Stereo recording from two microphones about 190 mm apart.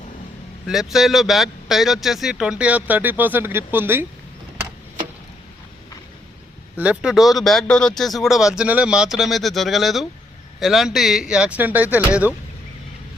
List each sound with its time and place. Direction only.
0.7 s a man's voice: centre (ahead or behind)
6.7 s a man's voice: 5° right (ahead or behind)